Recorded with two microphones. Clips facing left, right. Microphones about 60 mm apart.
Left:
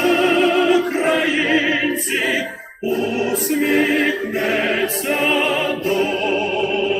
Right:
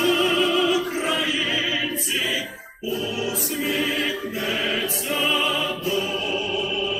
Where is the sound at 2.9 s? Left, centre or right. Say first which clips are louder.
Left 7 dB; left.